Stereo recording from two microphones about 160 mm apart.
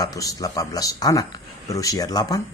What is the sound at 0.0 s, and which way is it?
Speech, 20° left (ahead or behind).